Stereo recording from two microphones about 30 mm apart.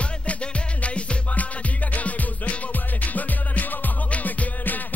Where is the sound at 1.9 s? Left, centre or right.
Left.